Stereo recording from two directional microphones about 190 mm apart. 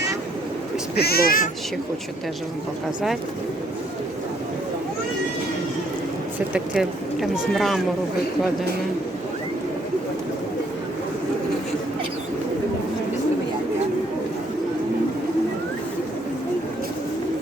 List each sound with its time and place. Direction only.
0.9 s speech: 55° left (ahead or behind)
6.5 s speech: 5° right (ahead or behind)